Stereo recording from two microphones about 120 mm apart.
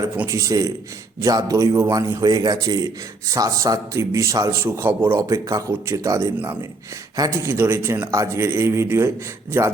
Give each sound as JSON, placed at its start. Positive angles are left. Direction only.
{"t": 0.3, "sound": "a man's voice", "side_deg": -25}